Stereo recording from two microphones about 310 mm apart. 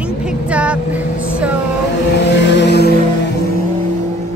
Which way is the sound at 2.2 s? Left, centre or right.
Left.